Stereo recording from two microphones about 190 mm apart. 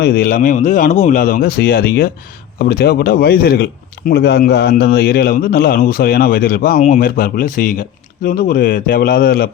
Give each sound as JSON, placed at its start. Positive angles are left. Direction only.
{"t": 0.0, "sound": "a man's voice", "side_deg": 50}